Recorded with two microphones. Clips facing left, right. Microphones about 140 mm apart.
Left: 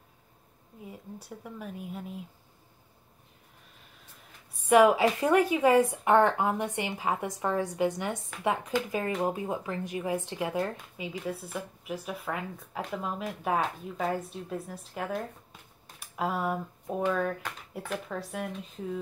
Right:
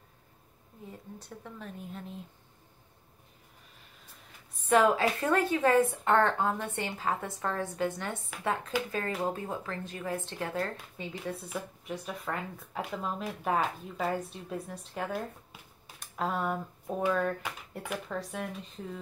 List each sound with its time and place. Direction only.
0.8 s speech: 10° left (ahead or behind)
4.6 s speech: 15° left (ahead or behind)
11.1 s speech: centre (ahead or behind)